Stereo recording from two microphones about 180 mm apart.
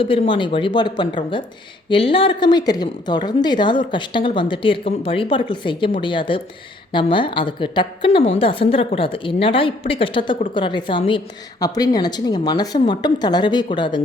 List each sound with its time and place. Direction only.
0.0 s a woman's voice: 30° left (ahead or behind)